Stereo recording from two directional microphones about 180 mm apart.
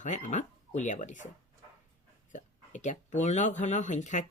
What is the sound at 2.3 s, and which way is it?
Speech, 45° left (ahead or behind).